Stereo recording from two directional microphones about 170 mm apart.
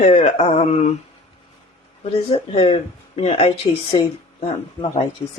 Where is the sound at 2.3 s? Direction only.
35° left (ahead or behind).